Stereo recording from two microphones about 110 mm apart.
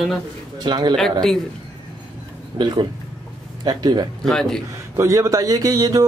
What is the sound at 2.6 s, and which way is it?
Speech, 45° right (ahead or behind).